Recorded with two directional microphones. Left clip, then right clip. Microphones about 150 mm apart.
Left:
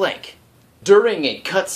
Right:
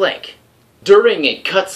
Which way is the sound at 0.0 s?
35° left (ahead or behind).